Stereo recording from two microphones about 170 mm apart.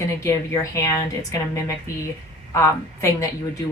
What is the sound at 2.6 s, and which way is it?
Speech, 15° left (ahead or behind).